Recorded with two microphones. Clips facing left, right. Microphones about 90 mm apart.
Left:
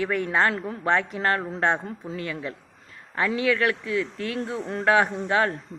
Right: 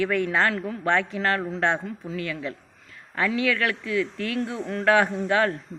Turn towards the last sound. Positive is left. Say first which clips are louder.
# right 1 dB
turn(degrees=25)  # may be behind; listen again after turning